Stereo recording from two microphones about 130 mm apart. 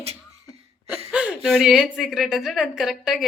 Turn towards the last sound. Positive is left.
turn(degrees=-5)  # may be behind; listen again after turning